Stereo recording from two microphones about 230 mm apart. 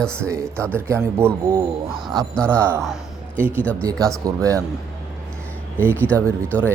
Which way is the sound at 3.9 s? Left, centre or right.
Centre.